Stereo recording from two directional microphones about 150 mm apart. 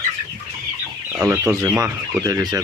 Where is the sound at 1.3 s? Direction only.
15° right (ahead or behind).